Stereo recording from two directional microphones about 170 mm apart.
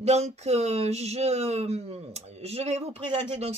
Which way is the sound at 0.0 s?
40° right (ahead or behind).